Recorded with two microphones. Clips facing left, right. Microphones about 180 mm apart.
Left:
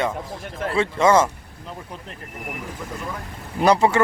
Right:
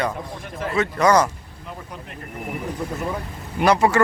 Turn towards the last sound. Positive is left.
turn(degrees=25)  # may be behind; listen again after turning